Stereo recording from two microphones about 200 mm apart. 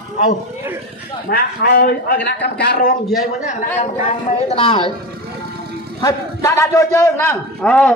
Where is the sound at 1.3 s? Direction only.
50° left (ahead or behind).